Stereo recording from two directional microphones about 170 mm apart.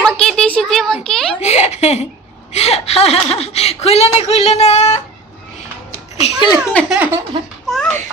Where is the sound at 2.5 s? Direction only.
40° left (ahead or behind).